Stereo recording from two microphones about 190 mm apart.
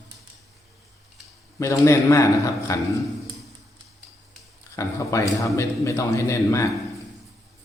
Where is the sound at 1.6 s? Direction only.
15° left (ahead or behind).